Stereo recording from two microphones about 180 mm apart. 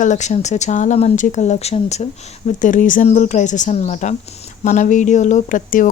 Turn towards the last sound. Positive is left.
turn(degrees=45)  # may be behind; listen again after turning